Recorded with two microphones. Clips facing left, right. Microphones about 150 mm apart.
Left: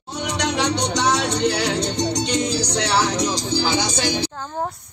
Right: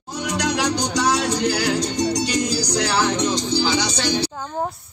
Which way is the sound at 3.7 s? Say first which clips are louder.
Even; 50° left (ahead or behind).